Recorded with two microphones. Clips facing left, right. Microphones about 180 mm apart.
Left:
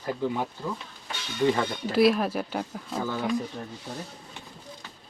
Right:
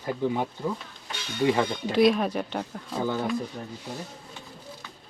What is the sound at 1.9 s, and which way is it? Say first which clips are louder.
Speech: even; 5° left (ahead or behind).